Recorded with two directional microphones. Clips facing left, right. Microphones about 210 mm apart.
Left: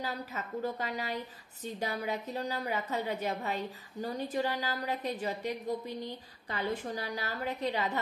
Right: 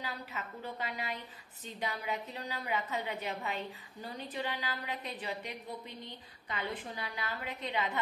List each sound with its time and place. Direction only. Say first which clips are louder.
0.0 s a woman's voice: left 4 dB; 40° left (ahead or behind)